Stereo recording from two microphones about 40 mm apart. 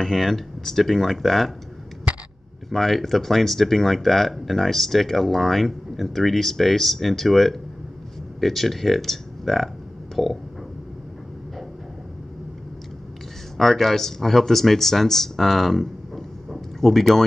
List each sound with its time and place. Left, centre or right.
0.0 s speech: centre
2.1 s hiccup: right
2.7 s speech: centre
10.1 s burping: centre
13.6 s speech: centre